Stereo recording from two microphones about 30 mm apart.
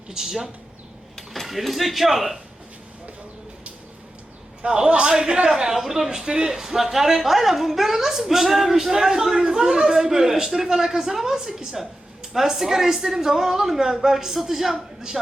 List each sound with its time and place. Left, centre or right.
0.1 s speech: centre
1.3 s speech: centre
4.9 s a man's voice: right; by 14.8 s centre